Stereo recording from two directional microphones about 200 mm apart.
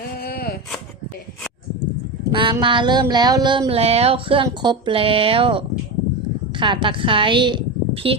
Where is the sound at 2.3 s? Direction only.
25° right (ahead or behind).